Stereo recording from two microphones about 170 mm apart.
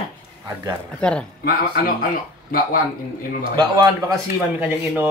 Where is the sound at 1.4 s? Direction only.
60° left (ahead or behind).